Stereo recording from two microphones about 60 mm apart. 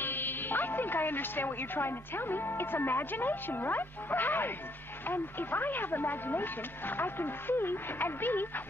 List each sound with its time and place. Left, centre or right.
0.0 s speech: left